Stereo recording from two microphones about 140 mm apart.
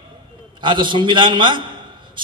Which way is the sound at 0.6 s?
35° right (ahead or behind).